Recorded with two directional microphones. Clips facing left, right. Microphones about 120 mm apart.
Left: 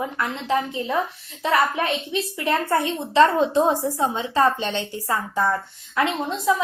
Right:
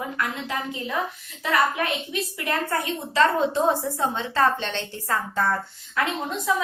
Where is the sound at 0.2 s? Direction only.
30° left (ahead or behind).